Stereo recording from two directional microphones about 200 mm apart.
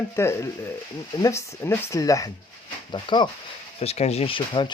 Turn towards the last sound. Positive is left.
turn(degrees=25)  # may be behind; listen again after turning